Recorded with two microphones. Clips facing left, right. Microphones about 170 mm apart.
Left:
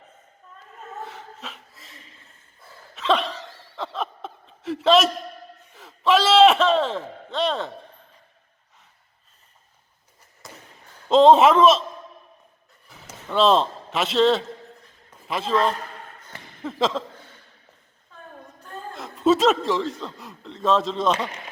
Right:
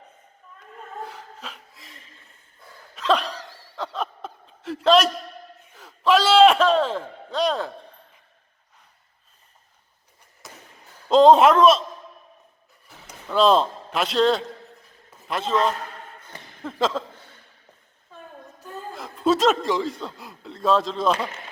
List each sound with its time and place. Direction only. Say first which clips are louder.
1.0 s a sound: even; centre (ahead or behind)
7.3 s a man's voice: right 1 dB; centre (ahead or behind)
10.4 s a sound: left 1 dB; centre (ahead or behind)
11.1 s a man's voice: even; centre (ahead or behind)
13.2 s a man's voice: right 1 dB; centre (ahead or behind)
18.6 s speech: right 1 dB; centre (ahead or behind)